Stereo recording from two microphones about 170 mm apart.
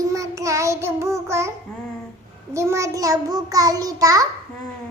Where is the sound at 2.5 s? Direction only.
15° right (ahead or behind).